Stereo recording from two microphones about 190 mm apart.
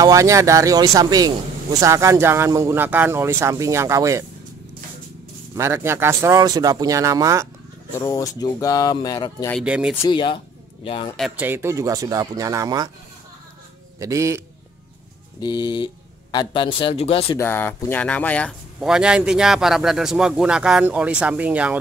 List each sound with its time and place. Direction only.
0.0 s a man's voice: 15° right (ahead or behind)
5.6 s a man's voice: 15° right (ahead or behind)
8.0 s speech: 20° left (ahead or behind)
9.7 s a man's voice: 5° right (ahead or behind)
10.0 s speech: 25° left (ahead or behind)
11.1 s a man's voice: 5° right (ahead or behind); by 12.9 s 20° right (ahead or behind)
13.9 s a man's voice: 15° right (ahead or behind)
15.4 s speech: 20° left (ahead or behind)
17.4 s speech: 10° left (ahead or behind)
18.8 s speech: 5° right (ahead or behind)